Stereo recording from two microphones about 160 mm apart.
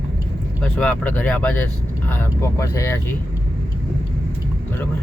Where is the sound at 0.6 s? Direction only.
5° left (ahead or behind).